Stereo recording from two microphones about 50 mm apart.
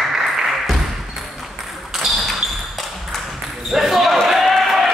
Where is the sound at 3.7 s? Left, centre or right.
Centre.